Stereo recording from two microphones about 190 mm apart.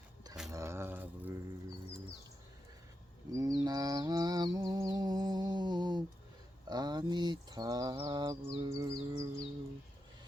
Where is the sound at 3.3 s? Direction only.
20° right (ahead or behind).